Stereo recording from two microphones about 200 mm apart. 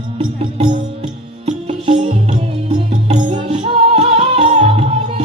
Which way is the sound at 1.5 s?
35° right (ahead or behind).